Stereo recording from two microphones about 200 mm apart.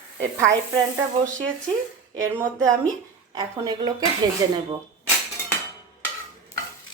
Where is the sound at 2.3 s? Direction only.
15° right (ahead or behind).